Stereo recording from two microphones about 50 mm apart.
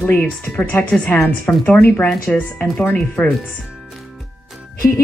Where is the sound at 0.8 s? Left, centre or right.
Left.